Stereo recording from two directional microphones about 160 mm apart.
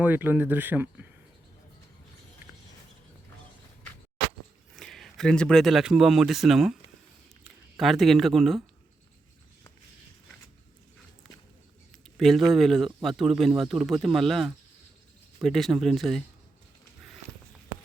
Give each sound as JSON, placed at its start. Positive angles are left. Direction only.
{"t": 0.0, "sound": "speech", "side_deg": -10}
{"t": 4.8, "sound": "speech", "side_deg": 0}
{"t": 12.1, "sound": "speech", "side_deg": 0}